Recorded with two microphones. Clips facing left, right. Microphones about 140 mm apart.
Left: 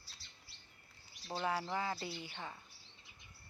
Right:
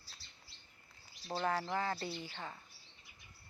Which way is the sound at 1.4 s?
10° left (ahead or behind).